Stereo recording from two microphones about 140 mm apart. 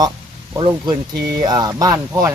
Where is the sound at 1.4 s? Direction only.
30° right (ahead or behind).